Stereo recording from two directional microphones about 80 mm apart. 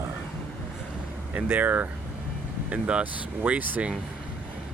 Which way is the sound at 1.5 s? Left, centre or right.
Right.